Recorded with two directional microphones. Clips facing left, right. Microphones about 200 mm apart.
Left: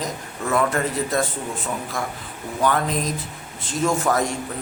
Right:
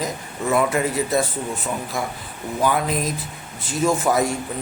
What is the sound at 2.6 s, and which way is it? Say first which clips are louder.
A man's voice: even; 10° right (ahead or behind).